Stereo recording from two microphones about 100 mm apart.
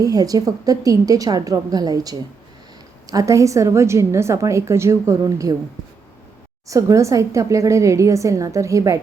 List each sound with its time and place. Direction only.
0.0 s a woman's voice: 35° right (ahead or behind)
6.7 s a woman's voice: 35° right (ahead or behind)